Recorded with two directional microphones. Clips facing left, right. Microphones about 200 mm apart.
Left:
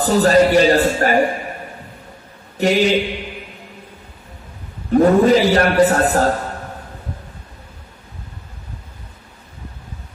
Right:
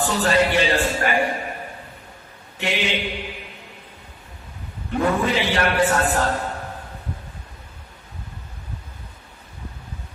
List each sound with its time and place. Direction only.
0.0 s music: 40° left (ahead or behind)
2.5 s a man's voice: 40° left (ahead or behind)
4.9 s a man's voice: 40° left (ahead or behind)